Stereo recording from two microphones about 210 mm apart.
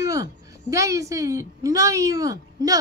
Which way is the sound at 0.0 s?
15° right (ahead or behind).